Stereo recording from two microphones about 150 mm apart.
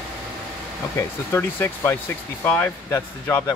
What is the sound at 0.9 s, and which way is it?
Speech, 15° left (ahead or behind).